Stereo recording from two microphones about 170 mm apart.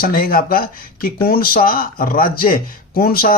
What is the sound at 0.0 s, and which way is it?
Speech, 60° left (ahead or behind).